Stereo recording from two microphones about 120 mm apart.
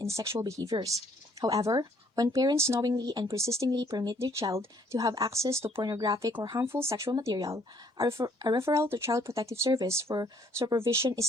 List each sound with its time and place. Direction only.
0.0 s a woman's voice: 25° right (ahead or behind)
4.2 s a woman's voice: 25° right (ahead or behind)
5.9 s a woman's voice: 35° right (ahead or behind)